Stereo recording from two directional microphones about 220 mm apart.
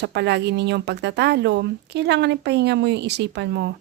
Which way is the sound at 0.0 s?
50° right (ahead or behind).